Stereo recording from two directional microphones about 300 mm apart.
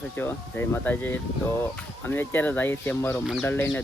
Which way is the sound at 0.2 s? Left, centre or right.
Centre.